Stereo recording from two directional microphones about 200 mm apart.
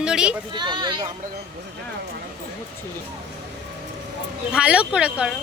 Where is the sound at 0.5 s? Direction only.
20° right (ahead or behind).